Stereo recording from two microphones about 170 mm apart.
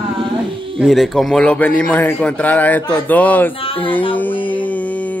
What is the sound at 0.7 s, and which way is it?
A man's voice, centre (ahead or behind).